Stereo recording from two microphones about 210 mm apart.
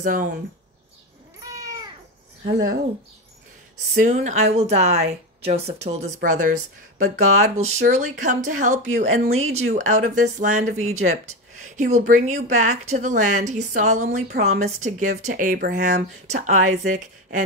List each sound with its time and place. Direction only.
0.0 s speech: 40° right (ahead or behind)
1.4 s cat: 15° right (ahead or behind)
4.0 s speech: 35° right (ahead or behind)